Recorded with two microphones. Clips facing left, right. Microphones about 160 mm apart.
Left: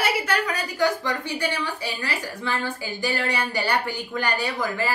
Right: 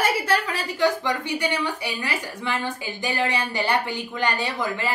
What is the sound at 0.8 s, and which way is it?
A woman's voice, 20° right (ahead or behind).